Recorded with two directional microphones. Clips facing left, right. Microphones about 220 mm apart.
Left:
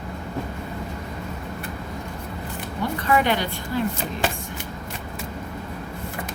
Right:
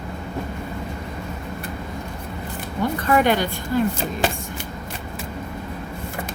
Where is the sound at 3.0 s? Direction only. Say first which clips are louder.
Right 3 dB; 45° right (ahead or behind).